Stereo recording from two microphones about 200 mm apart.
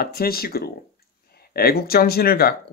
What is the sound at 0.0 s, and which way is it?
Speech, 50° left (ahead or behind).